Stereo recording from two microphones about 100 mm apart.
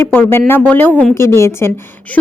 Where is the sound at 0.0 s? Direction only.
20° left (ahead or behind).